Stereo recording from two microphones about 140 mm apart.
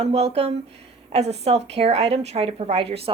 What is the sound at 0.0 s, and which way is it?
A woman's voice, 50° right (ahead or behind).